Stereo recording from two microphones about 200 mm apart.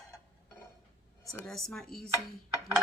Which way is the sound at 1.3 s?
Centre (ahead or behind).